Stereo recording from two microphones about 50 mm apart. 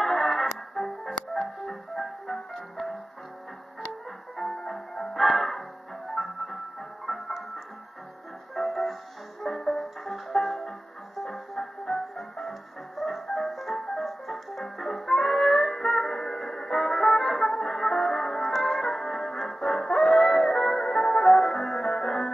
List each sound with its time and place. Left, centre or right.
0.0 s music: centre
4.4 s music: centre
8.5 s music: centre